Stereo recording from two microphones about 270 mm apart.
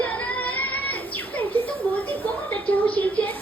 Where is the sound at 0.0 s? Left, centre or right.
Centre.